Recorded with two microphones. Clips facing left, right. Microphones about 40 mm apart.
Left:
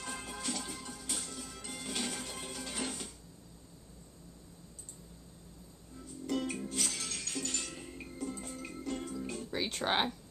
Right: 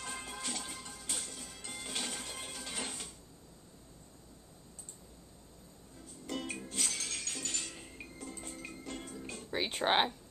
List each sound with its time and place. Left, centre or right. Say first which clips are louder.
0.0 s music: left 1 dB; centre
6.2 s music: left 5 dB; centre
9.5 s music: right 3 dB; right